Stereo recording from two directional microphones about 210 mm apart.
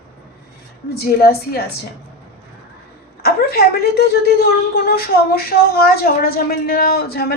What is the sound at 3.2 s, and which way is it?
A woman's voice, 45° left (ahead or behind).